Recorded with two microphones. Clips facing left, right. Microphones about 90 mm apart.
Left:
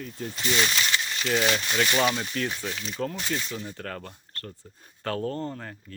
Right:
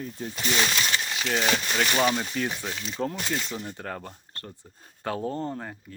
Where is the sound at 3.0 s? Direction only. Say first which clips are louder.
Right 1 dB; 30° right (ahead or behind).